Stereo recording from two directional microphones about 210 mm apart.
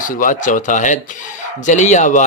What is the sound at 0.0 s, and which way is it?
Speech, 40° left (ahead or behind).